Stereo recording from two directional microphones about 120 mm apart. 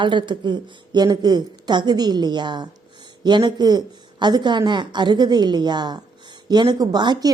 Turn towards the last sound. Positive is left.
turn(degrees=-35)  # may be behind; listen again after turning